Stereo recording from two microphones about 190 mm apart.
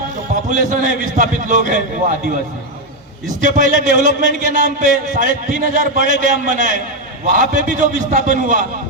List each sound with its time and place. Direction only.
0.5 s a man's voice: 40° right (ahead or behind)
3.4 s a man's voice: 40° right (ahead or behind)